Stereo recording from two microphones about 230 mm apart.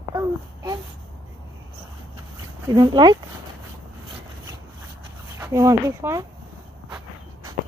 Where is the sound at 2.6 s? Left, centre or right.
Centre.